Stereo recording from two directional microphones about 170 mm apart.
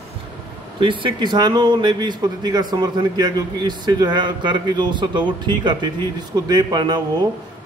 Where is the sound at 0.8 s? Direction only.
30° right (ahead or behind).